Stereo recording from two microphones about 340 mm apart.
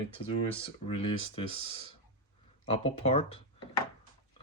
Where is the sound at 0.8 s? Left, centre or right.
Centre.